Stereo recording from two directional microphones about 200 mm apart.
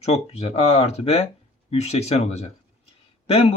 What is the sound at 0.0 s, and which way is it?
A man's voice, 30° left (ahead or behind).